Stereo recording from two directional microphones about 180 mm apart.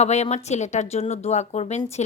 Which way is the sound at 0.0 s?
40° left (ahead or behind).